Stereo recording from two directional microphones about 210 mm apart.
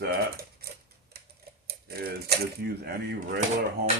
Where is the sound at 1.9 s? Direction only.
50° right (ahead or behind).